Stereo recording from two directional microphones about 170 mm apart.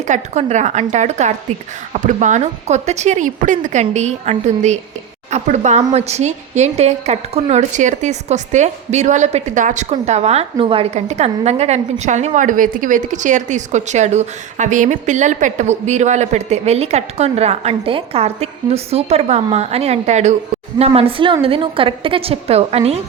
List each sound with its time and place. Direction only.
0.1 s a woman's voice: 45° right (ahead or behind)